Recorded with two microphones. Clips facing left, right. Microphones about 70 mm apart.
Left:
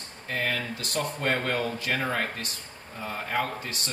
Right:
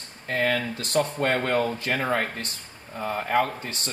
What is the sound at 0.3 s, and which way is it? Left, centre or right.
Speech, right.